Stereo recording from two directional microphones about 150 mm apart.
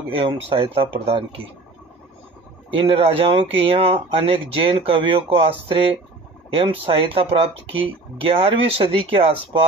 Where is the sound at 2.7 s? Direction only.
35° right (ahead or behind).